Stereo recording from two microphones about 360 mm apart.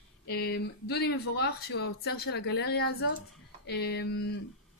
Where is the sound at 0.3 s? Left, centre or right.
Left.